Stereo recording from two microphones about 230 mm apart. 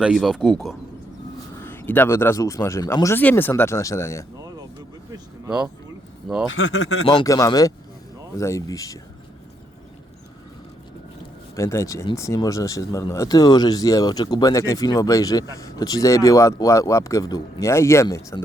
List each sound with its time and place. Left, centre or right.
0.0 s speech: centre
5.5 s speech: centre
6.5 s speech: left
7.0 s speech: centre
11.5 s speech: centre